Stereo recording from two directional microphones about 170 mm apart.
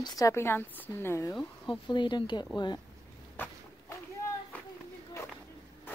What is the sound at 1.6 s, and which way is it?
Speech, 30° left (ahead or behind).